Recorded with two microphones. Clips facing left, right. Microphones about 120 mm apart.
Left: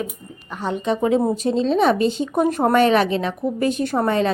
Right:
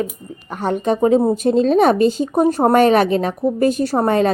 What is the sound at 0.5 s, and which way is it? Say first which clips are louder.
Speech: right 4 dB; 50° right (ahead or behind).